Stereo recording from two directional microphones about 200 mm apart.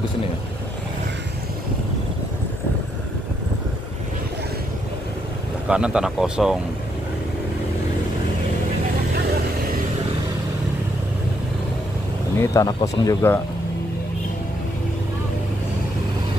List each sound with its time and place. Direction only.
5.7 s speech: 5° right (ahead or behind)
12.4 s speech: 15° left (ahead or behind)